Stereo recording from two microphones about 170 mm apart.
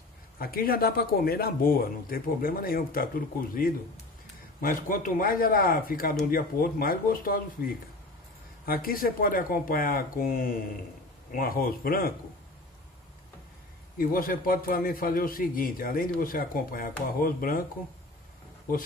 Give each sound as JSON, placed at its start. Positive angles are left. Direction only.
{"t": 0.4, "sound": "a man's voice", "side_deg": 60}
{"t": 13.9, "sound": "a man's voice", "side_deg": 55}